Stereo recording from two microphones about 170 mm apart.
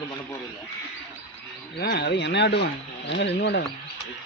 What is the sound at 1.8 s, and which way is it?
Speech, 75° left (ahead or behind).